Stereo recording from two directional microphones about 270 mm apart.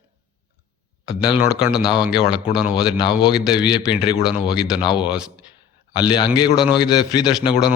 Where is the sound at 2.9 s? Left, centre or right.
Centre.